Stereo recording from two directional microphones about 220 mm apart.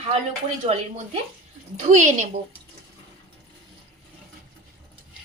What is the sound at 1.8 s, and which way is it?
Speech, 35° right (ahead or behind).